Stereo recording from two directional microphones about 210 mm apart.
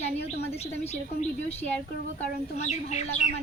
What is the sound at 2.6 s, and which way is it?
Speech, 35° left (ahead or behind).